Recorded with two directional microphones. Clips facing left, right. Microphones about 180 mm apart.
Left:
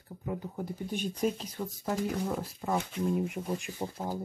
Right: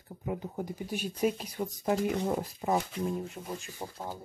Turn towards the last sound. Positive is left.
turn(degrees=15)  # may be behind; listen again after turning